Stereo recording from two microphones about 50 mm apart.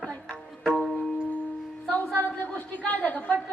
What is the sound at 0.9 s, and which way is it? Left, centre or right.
Music, centre.